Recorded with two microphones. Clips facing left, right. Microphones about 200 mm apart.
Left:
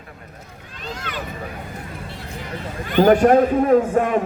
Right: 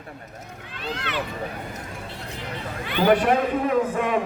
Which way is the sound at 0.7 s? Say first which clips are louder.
Right 1 dB; 45° left (ahead or behind).